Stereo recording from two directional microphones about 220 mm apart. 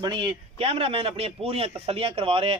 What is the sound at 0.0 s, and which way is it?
A man's voice, 20° right (ahead or behind).